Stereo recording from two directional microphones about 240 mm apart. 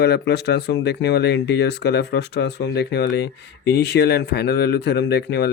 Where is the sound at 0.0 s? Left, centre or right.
Left.